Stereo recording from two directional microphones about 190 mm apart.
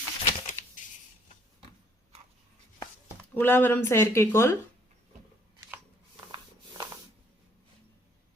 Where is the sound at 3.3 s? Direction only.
10° left (ahead or behind).